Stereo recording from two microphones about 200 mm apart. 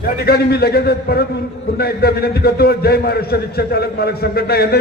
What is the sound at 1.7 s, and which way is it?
A man's voice, 50° left (ahead or behind).